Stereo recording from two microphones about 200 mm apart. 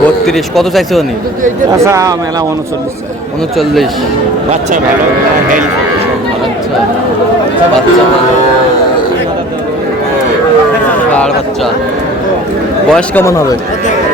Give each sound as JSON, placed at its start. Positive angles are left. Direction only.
{"t": 0.3, "sound": "speech", "side_deg": 0}
{"t": 1.8, "sound": "speech", "side_deg": -15}
{"t": 12.9, "sound": "speech", "side_deg": 10}